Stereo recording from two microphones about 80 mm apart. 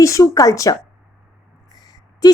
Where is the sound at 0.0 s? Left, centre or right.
Left.